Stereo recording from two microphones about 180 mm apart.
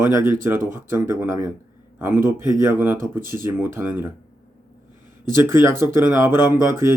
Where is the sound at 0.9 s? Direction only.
10° right (ahead or behind).